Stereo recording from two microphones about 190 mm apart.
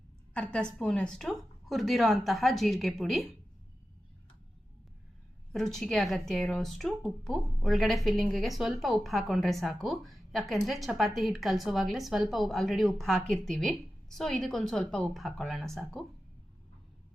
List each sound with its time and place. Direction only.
0.3 s speech: 5° left (ahead or behind)
5.5 s speech: centre (ahead or behind)